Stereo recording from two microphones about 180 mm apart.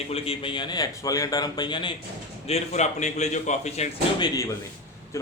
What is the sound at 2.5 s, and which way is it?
A man's voice, 40° left (ahead or behind).